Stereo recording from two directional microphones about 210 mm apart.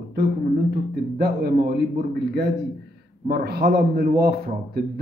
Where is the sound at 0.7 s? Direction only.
50° right (ahead or behind).